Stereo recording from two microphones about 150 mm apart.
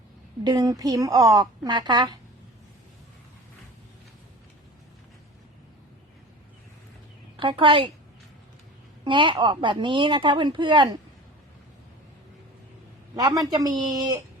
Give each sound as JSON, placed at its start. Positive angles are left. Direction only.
{"t": 0.4, "sound": "a woman's voice", "side_deg": -25}
{"t": 7.3, "sound": "speech", "side_deg": -35}
{"t": 9.0, "sound": "speech", "side_deg": -35}
{"t": 13.1, "sound": "a woman's voice", "side_deg": -25}